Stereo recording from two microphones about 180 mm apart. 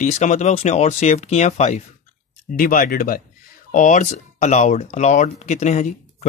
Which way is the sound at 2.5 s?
50° left (ahead or behind).